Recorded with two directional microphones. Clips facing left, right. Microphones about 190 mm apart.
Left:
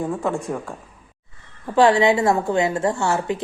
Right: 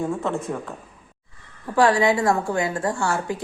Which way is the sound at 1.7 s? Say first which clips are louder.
Left 3 dB; 25° left (ahead or behind).